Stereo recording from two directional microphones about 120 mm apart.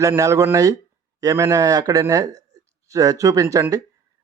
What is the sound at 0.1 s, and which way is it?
Speech, 25° right (ahead or behind).